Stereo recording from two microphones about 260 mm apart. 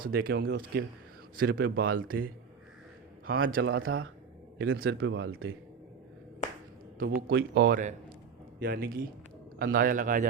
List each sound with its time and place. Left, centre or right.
0.0 s speech: right
3.3 s speech: right
7.2 s speech: right